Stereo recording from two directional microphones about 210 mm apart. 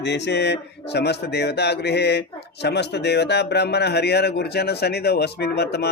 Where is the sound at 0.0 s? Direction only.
55° left (ahead or behind).